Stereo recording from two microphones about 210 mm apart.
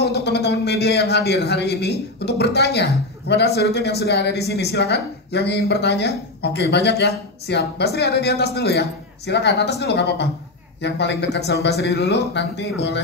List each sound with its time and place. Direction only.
0.0 s a man's voice: 50° left (ahead or behind)